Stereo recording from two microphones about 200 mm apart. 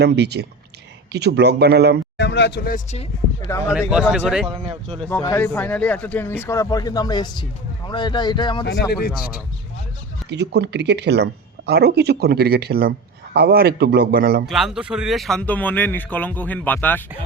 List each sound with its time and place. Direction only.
0.0 s speech: 55° right (ahead or behind)
2.1 s speech: 60° left (ahead or behind)
2.7 s speech: 30° left (ahead or behind)
3.7 s speech: 5° right (ahead or behind)
4.4 s speech: 25° right (ahead or behind)
5.2 s speech: 15° left (ahead or behind)
8.6 s speech: 55° left (ahead or behind)
10.2 s speech: 55° right (ahead or behind)
14.4 s speech: centre (ahead or behind)